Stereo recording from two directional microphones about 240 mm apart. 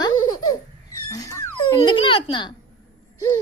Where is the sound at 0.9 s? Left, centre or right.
Centre.